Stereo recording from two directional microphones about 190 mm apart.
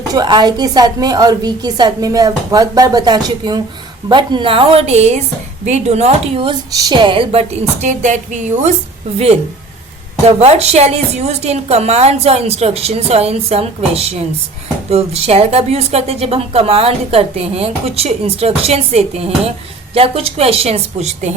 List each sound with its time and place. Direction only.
0.1 s a woman's voice: 20° right (ahead or behind)
7.8 s a woman's voice: 40° right (ahead or behind)